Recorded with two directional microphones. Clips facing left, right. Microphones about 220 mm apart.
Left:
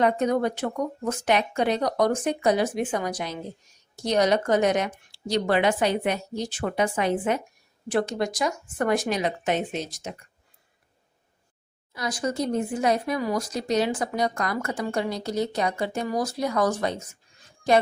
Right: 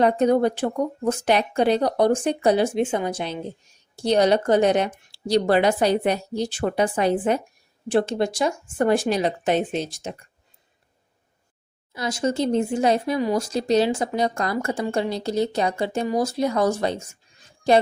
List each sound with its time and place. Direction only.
0.0 s speech: 30° right (ahead or behind)
11.9 s speech: 25° right (ahead or behind)